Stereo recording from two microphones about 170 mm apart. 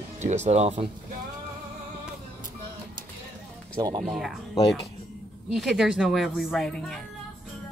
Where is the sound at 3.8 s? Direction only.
20° right (ahead or behind).